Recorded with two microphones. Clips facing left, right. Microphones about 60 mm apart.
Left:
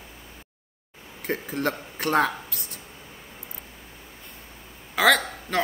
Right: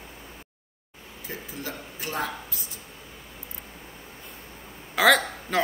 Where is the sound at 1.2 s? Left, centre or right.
Left.